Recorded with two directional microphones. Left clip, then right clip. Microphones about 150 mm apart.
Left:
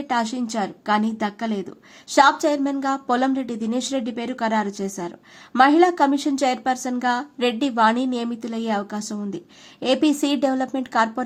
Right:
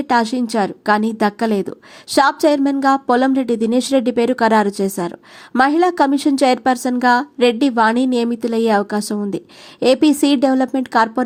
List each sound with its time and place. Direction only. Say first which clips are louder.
0.1 s speech: right 7 dB; 35° right (ahead or behind)